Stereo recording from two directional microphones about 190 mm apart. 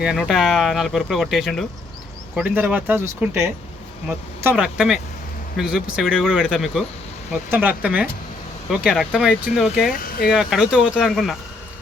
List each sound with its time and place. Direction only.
0.0 s speech: 5° right (ahead or behind)
9.9 s speech: 50° left (ahead or behind)
10.3 s speech: 5° right (ahead or behind)